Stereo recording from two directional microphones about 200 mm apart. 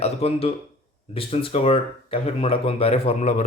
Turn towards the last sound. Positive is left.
turn(degrees=30)  # may be behind; listen again after turning